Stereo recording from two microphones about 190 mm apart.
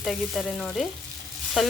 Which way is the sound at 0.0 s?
Centre (ahead or behind).